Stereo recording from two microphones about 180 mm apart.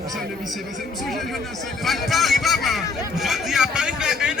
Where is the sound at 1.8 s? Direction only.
Centre (ahead or behind).